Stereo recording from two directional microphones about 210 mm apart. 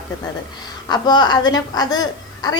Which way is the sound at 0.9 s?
20° left (ahead or behind).